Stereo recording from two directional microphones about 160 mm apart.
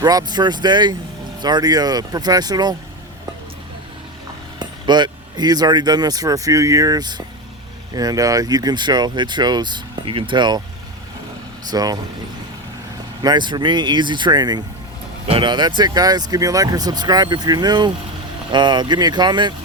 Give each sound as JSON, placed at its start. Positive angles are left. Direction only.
{"t": 0.0, "sound": "speech", "side_deg": -25}
{"t": 4.6, "sound": "speech", "side_deg": -25}
{"t": 11.7, "sound": "speech", "side_deg": -25}
{"t": 13.2, "sound": "speech", "side_deg": -30}